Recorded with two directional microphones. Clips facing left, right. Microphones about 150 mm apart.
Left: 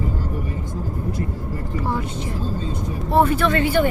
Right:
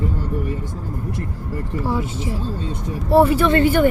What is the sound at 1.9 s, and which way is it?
Speech, 5° right (ahead or behind).